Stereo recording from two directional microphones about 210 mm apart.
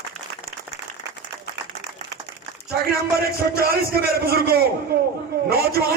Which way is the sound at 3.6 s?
45° right (ahead or behind).